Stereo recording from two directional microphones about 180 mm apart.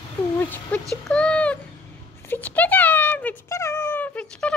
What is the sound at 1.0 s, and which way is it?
Cat, 5° left (ahead or behind).